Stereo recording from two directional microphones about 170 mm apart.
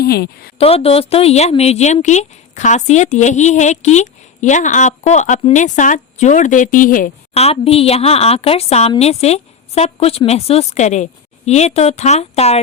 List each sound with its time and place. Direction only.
0.0 s a woman's voice: 65° left (ahead or behind)
0.6 s a woman's voice: 35° left (ahead or behind); by 7.1 s 55° left (ahead or behind)
7.3 s a woman's voice: 35° left (ahead or behind)